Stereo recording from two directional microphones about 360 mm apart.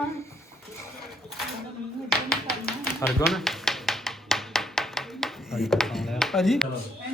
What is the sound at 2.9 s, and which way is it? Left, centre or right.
Speech, centre.